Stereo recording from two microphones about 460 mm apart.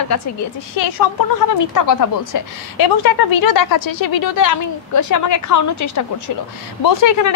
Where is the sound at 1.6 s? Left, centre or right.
Left.